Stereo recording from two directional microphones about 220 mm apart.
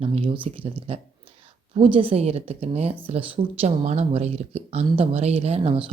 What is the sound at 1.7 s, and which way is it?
Speech, 25° right (ahead or behind).